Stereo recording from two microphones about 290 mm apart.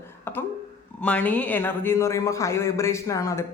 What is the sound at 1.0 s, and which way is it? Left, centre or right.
Speech, centre.